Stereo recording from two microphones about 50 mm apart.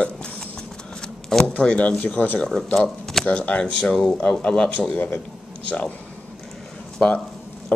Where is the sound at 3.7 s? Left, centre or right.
Centre.